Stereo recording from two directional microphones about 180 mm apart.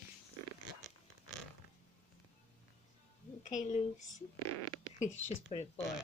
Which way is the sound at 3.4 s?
45° left (ahead or behind).